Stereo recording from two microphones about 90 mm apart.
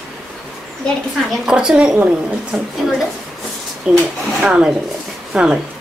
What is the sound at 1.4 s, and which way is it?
Speech, 10° right (ahead or behind).